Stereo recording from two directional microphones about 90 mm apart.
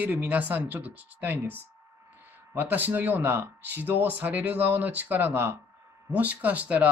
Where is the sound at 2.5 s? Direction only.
20° right (ahead or behind).